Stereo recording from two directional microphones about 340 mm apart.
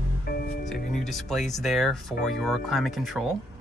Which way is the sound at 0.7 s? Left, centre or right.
Left.